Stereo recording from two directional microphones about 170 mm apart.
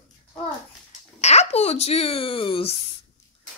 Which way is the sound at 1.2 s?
40° left (ahead or behind).